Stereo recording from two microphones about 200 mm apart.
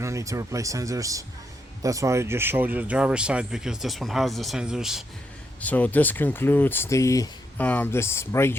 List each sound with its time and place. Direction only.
0.0 s speech: 15° right (ahead or behind); by 8.5 s 15° left (ahead or behind)